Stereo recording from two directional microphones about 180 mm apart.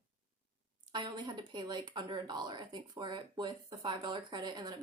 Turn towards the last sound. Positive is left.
turn(degrees=-25)  # may be behind; listen again after turning